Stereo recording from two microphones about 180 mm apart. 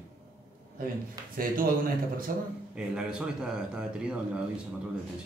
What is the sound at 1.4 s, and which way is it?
Speech, 55° right (ahead or behind).